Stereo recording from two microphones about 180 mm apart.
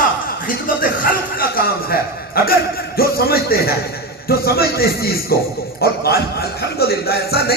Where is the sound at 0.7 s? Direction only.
55° left (ahead or behind).